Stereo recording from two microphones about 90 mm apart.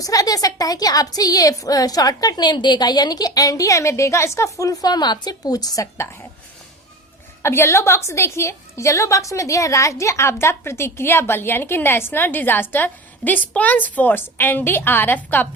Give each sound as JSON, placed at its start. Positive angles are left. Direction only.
{"t": 0.0, "sound": "a woman's voice", "side_deg": 40}
{"t": 7.4, "sound": "a woman's voice", "side_deg": 30}